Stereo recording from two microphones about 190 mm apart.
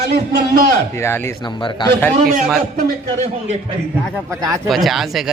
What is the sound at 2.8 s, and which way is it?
Speech, 35° right (ahead or behind).